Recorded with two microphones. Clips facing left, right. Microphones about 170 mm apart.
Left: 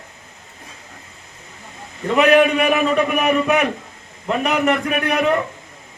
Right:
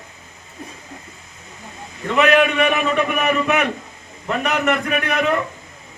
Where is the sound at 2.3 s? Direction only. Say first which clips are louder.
Left 3 dB; 35° left (ahead or behind).